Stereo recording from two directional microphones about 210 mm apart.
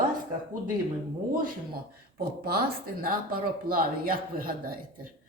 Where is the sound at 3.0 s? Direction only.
45° right (ahead or behind).